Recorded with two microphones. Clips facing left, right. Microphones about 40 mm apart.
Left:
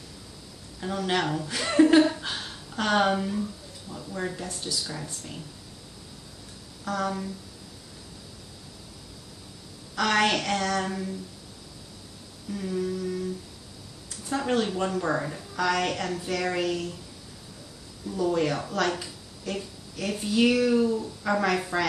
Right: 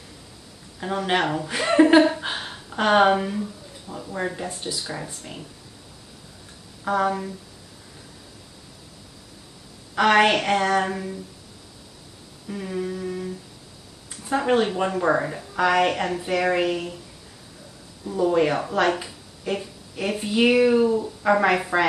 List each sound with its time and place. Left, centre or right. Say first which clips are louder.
0.7 s a woman's voice: right 4 dB; right
6.8 s a woman's voice: right 6 dB; right
9.9 s a woman's voice: right 6 dB; right
12.4 s a woman's voice: right 1 dB; right
14.3 s a woman's voice: right 5 dB; right
18.0 s a woman's voice: right 5 dB; right